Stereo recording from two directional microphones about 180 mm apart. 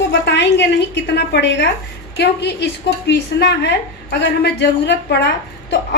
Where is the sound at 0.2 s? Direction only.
70° left (ahead or behind).